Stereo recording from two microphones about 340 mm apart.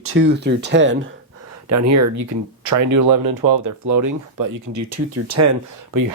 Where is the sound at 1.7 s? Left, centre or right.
Right.